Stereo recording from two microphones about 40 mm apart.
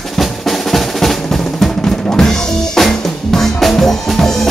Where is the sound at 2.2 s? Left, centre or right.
Centre.